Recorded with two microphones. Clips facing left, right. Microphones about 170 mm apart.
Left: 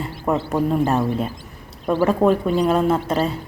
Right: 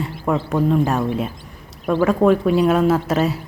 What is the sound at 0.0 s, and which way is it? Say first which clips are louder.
Speech: right 1 dB; 5° left (ahead or behind).